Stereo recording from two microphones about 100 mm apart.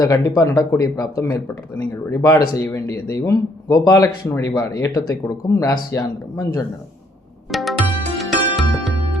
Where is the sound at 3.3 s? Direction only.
35° left (ahead or behind).